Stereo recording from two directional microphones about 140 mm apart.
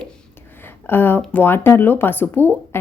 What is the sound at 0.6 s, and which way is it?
Speech, 15° left (ahead or behind).